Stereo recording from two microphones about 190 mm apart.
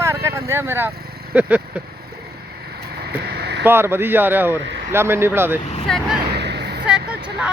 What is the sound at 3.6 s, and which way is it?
A man's voice, 10° right (ahead or behind).